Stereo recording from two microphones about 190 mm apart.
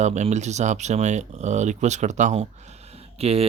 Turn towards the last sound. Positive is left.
turn(degrees=-30)  # may be behind; listen again after turning